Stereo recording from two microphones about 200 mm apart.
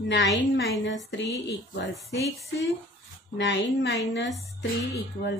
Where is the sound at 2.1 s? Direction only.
55° left (ahead or behind).